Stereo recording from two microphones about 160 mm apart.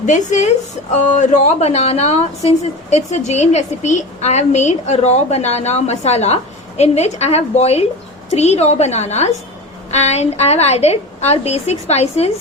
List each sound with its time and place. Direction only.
0.0 s a woman's voice: 50° left (ahead or behind)